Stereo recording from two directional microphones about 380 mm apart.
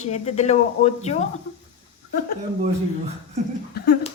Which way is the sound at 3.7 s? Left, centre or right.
Left.